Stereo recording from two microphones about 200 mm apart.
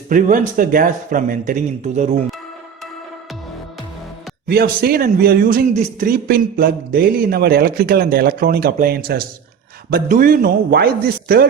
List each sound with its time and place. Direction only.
0.1 s a man's voice: 40° right (ahead or behind)
4.4 s a man's voice: 50° right (ahead or behind)